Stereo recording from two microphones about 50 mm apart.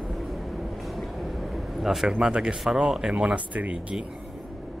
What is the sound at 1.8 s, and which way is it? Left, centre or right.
Speech, centre.